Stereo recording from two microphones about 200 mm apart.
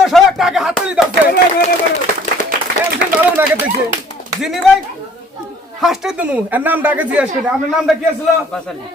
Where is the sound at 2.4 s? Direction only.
40° left (ahead or behind).